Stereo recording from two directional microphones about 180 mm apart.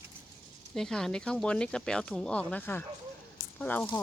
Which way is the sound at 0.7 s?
5° left (ahead or behind).